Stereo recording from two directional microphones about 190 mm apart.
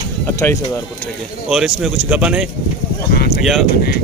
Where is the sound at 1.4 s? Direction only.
Centre (ahead or behind).